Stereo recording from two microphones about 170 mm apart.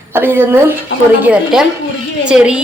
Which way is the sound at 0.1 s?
15° right (ahead or behind).